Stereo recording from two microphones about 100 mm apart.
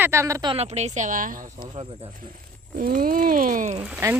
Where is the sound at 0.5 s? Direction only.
90° right.